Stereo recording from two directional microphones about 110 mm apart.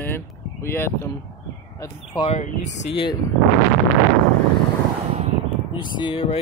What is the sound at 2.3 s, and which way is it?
Speech, 90° left.